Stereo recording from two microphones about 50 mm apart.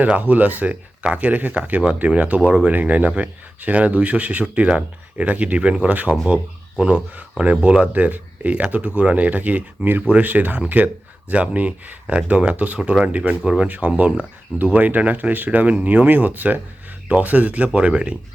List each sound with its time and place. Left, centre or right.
0.0 s speech: right
13.1 s speech: right